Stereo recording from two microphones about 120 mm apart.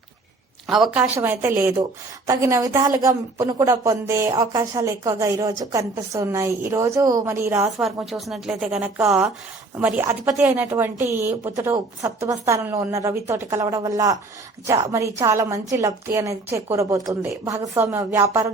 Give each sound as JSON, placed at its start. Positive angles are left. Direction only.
{"t": 0.7, "sound": "speech", "side_deg": -5}
{"t": 0.9, "sound": "a woman's voice", "side_deg": -15}
{"t": 7.8, "sound": "a woman's voice", "side_deg": -5}